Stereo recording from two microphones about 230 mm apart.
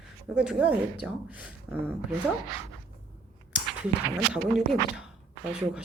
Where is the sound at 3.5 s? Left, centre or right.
Centre.